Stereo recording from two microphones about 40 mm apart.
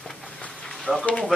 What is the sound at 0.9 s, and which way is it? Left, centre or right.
Speech, centre.